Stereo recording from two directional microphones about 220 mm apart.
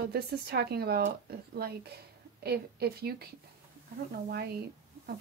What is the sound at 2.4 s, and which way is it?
Speech, 45° right (ahead or behind).